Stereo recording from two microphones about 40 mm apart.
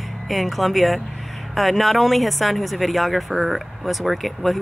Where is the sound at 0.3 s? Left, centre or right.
Centre.